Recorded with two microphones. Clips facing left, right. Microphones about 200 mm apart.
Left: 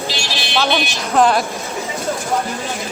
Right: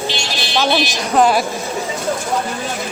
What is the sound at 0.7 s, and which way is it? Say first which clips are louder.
Speech: right 2 dB; centre (ahead or behind).